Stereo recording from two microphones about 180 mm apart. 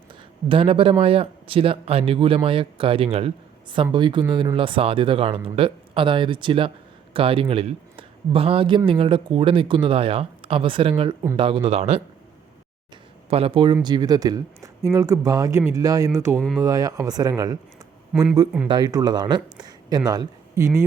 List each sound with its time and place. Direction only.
0.4 s a man's voice: 30° right (ahead or behind)
13.3 s speech: 30° right (ahead or behind)
18.1 s speech: 5° right (ahead or behind)
18.7 s speech: 20° right (ahead or behind)